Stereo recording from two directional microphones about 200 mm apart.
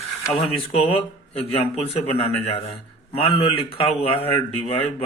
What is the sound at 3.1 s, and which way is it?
A man's voice, 25° left (ahead or behind).